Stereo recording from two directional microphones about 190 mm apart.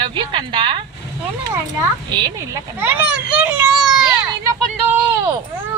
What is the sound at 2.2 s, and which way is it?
A child's voice, 15° right (ahead or behind).